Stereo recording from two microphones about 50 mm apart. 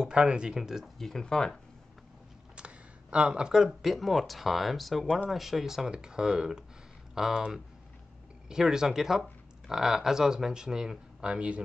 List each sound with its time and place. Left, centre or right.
0.0 s speech: centre
0.9 s speech: centre
2.5 s speech: right
8.5 s speech: centre